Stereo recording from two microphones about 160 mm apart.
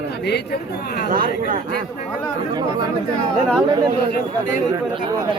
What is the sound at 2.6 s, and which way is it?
Speech, 25° right (ahead or behind).